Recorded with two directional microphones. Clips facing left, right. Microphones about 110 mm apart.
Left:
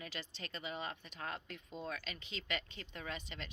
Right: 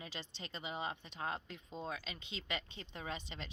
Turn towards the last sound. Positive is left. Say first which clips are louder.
# right 1 dB
turn(degrees=-25)  # may be behind; listen again after turning